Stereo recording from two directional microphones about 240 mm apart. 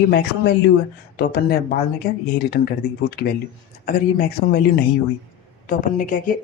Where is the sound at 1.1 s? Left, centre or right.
Left.